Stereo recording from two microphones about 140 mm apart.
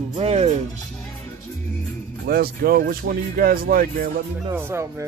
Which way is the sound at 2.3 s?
90° right.